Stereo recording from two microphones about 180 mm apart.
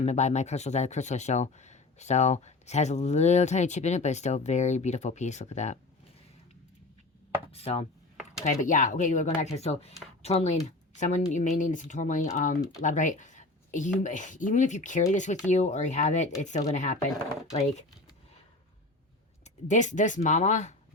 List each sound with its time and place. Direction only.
0.0 s speech: 40° left (ahead or behind)
7.5 s speech: 35° left (ahead or behind)
8.6 s speech: 45° left (ahead or behind)
19.5 s speech: 40° left (ahead or behind)